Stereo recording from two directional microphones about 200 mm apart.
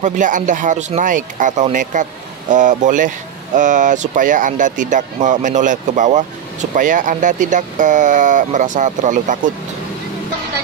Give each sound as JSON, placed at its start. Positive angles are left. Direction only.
{"t": 0.0, "sound": "speech", "side_deg": -40}